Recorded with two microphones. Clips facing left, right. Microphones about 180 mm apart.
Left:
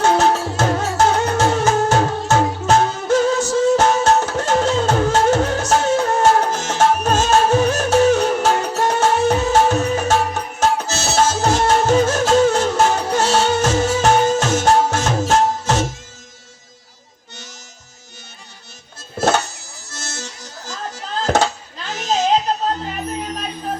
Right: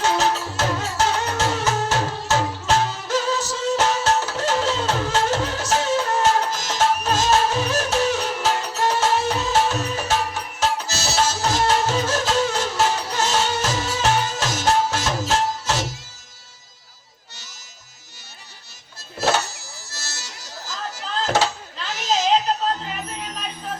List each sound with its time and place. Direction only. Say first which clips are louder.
0.0 s music: left 6 dB; 50° left (ahead or behind)
19.9 s music: left 8 dB; 50° left (ahead or behind)
21.2 s a sound: left 4 dB; 50° left (ahead or behind)